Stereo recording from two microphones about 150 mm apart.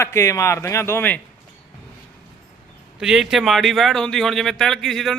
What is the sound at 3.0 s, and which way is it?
Speech, 5° right (ahead or behind).